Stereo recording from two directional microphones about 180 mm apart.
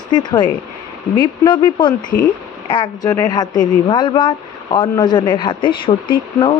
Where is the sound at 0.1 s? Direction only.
25° left (ahead or behind).